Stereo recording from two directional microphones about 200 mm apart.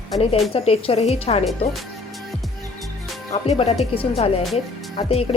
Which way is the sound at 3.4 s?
30° left (ahead or behind).